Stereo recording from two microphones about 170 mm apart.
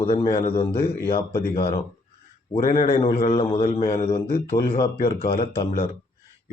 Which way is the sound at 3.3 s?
30° left (ahead or behind).